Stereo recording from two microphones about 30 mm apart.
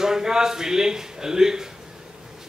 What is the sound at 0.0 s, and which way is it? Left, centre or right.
A man's voice, centre.